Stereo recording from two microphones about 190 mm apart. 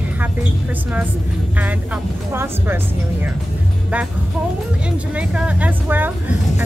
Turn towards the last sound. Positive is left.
turn(degrees=-10)  # may be behind; listen again after turning